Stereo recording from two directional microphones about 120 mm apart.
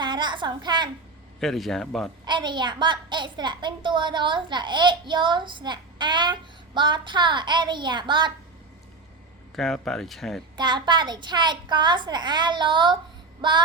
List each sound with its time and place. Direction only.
0.0 s a sound: 40° right (ahead or behind)
1.4 s speech: centre (ahead or behind)
2.2 s a woman's voice: 40° right (ahead or behind)
9.6 s speech: centre (ahead or behind)
10.6 s a woman's voice: 40° right (ahead or behind)